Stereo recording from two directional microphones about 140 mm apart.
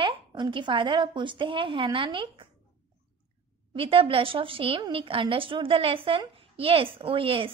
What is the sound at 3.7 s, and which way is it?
A woman's voice, 40° right (ahead or behind).